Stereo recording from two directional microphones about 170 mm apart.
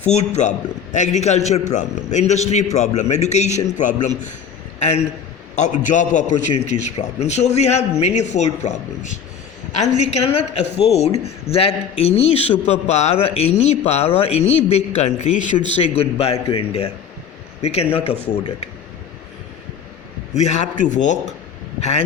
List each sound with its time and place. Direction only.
0.0 s a man's voice: 40° left (ahead or behind)
20.3 s a man's voice: 40° left (ahead or behind)